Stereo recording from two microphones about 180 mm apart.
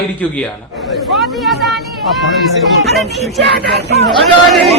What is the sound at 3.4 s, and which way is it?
Speech, 70° right (ahead or behind).